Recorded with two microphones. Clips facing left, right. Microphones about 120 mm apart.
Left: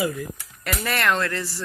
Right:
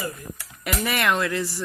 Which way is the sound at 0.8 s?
15° right (ahead or behind).